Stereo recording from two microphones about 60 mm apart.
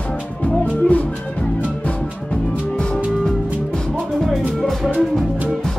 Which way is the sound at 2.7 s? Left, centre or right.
Centre.